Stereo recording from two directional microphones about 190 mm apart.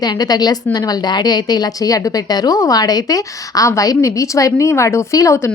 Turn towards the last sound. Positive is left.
turn(degrees=15)  # may be behind; listen again after turning